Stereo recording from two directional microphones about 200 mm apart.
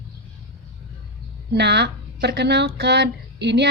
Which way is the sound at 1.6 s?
60° right (ahead or behind).